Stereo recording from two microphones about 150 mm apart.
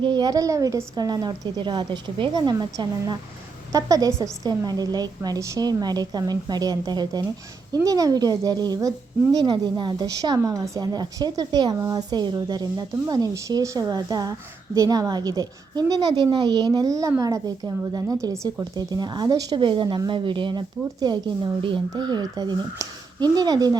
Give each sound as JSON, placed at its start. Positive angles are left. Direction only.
{"t": 0.0, "sound": "a woman's voice", "side_deg": -30}